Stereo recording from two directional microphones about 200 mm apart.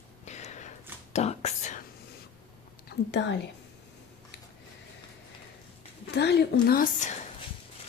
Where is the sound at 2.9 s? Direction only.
60° left (ahead or behind).